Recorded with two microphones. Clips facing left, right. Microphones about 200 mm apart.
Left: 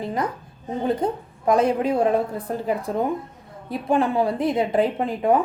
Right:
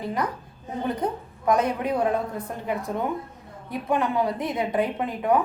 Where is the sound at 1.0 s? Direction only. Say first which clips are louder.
Left 2 dB; 25° left (ahead or behind).